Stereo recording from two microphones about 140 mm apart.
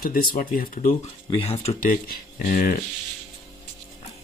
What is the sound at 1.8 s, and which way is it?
Speech, 80° left.